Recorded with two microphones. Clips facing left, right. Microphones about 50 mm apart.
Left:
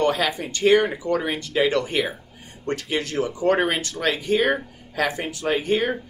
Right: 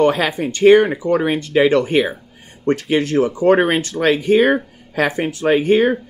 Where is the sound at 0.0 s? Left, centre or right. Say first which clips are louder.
Right 6 dB; right.